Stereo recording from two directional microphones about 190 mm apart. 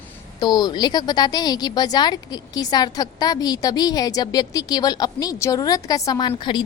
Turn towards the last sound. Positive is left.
turn(degrees=25)  # may be behind; listen again after turning